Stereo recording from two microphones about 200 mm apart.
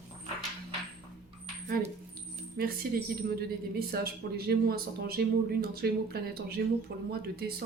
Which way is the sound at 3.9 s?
50° right (ahead or behind).